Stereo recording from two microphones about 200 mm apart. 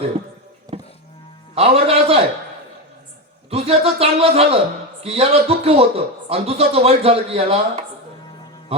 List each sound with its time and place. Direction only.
0.7 s music: 15° right (ahead or behind)
1.5 s a man's voice: 30° right (ahead or behind)
3.5 s a man's voice: 30° right (ahead or behind)